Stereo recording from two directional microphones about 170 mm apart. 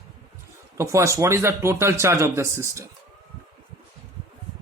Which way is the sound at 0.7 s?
15° right (ahead or behind).